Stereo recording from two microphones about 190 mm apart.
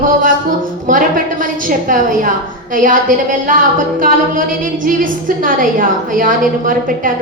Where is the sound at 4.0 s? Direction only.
45° right (ahead or behind).